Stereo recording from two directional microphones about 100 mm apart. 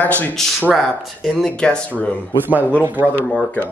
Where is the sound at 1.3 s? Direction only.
10° left (ahead or behind).